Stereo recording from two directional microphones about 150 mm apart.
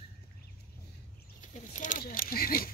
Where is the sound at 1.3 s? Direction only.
60° left (ahead or behind); by 2.6 s 80° left.